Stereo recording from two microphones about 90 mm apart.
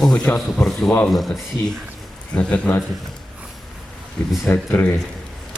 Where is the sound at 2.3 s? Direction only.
15° left (ahead or behind).